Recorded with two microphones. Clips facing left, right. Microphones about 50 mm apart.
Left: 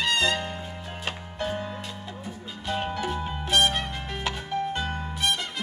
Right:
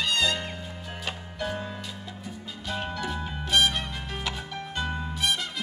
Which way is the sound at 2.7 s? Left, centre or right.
Left.